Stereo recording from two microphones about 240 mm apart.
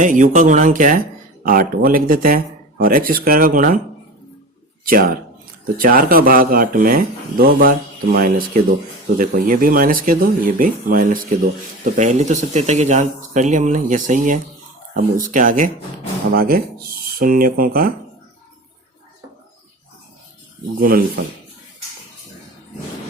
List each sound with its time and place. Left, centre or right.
0.0 s speech: right
4.9 s speech: right
20.7 s speech: right